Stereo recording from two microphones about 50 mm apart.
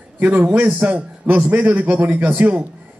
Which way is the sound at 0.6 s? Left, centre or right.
Right.